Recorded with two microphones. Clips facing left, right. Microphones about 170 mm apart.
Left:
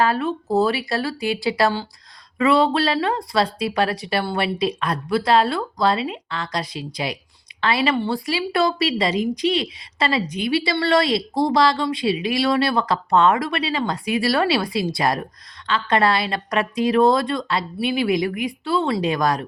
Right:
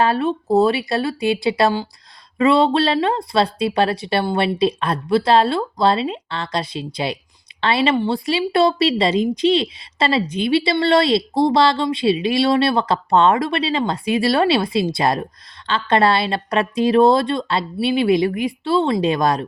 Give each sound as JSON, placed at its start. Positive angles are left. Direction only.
{"t": 0.0, "sound": "a woman's voice", "side_deg": -25}